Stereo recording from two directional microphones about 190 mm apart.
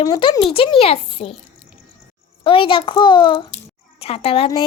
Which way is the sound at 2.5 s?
25° left (ahead or behind).